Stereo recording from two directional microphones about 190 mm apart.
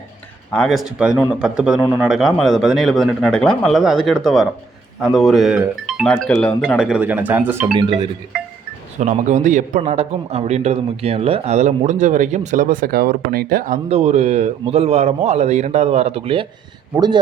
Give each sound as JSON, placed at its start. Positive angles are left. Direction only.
{"t": 0.5, "sound": "a man's voice", "side_deg": 0}
{"t": 9.0, "sound": "speech", "side_deg": -40}
{"t": 13.9, "sound": "speech", "side_deg": -35}